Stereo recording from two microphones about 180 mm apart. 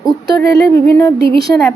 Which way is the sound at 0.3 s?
20° left (ahead or behind).